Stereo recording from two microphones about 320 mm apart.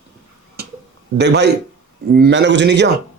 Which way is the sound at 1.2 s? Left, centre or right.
Right.